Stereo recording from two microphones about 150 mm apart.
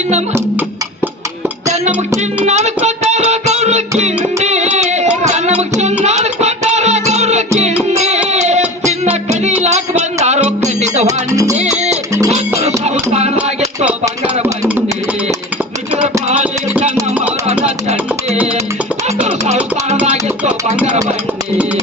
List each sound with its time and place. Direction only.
1.6 s music: 50° right (ahead or behind)
6.1 s music: 50° right (ahead or behind)
11.0 s music: 20° right (ahead or behind)
11.5 s music: 50° right (ahead or behind)
14.4 s a sound: 15° right (ahead or behind)
16.8 s music: 45° right (ahead or behind)
19.0 s music: 45° right (ahead or behind)
20.8 s a sound: 50° right (ahead or behind)